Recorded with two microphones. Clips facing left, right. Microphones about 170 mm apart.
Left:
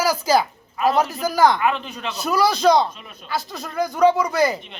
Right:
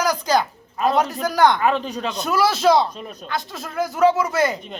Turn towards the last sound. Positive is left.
turn(degrees=0)  # may be behind; listen again after turning